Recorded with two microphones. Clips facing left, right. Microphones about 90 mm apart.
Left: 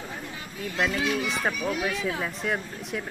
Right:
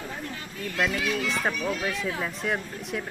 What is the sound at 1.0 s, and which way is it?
Speech, 20° left (ahead or behind).